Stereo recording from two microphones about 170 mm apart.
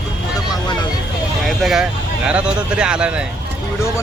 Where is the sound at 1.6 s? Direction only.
Centre (ahead or behind).